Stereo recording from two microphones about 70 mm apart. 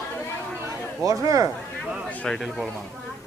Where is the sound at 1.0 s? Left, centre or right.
Right.